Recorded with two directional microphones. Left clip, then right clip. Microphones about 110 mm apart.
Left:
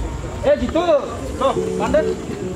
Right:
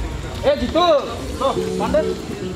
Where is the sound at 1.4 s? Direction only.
40° left (ahead or behind).